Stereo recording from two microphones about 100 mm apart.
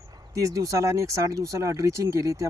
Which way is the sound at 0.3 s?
35° right (ahead or behind).